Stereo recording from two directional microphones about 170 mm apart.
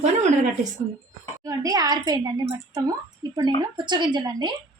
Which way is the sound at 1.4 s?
20° right (ahead or behind).